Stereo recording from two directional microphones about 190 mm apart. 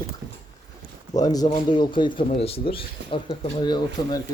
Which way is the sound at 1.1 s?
20° left (ahead or behind).